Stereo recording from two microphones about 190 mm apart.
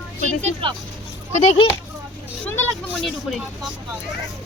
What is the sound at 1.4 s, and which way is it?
Speech, 35° left (ahead or behind).